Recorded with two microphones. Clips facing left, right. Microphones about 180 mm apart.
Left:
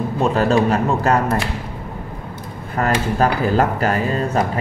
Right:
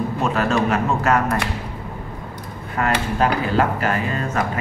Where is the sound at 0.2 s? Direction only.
35° left (ahead or behind).